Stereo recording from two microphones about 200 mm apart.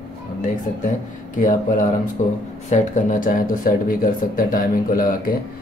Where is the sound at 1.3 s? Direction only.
40° left (ahead or behind).